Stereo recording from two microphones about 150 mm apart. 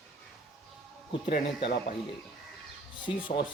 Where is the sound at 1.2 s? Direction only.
65° left (ahead or behind).